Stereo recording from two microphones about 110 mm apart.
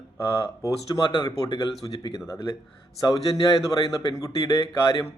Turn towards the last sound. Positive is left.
turn(degrees=35)  # may be behind; listen again after turning